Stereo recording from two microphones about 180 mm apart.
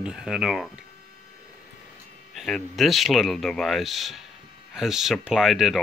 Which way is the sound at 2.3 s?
Centre (ahead or behind).